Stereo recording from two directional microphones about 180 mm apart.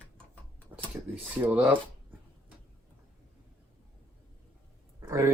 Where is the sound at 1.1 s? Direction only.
10° right (ahead or behind).